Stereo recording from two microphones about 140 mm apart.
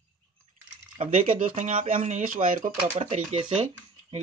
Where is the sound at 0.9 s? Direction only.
65° right (ahead or behind).